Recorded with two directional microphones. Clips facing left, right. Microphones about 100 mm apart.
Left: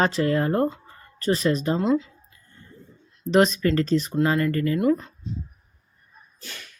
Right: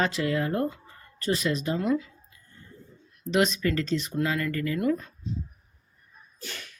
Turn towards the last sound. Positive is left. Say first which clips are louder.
# left 5 dB
turn(degrees=25)  # may be behind; listen again after turning